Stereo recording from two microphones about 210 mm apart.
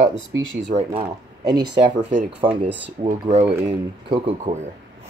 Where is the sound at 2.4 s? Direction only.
5° right (ahead or behind).